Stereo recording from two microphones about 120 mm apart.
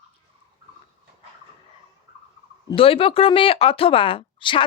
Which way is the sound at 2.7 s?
50° left (ahead or behind).